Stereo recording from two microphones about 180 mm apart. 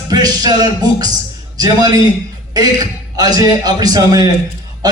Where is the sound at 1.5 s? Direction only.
20° right (ahead or behind).